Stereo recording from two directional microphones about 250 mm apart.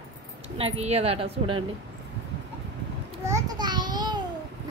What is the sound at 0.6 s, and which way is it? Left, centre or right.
Speech, right.